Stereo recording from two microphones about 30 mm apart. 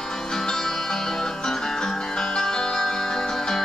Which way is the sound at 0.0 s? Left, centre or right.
Centre.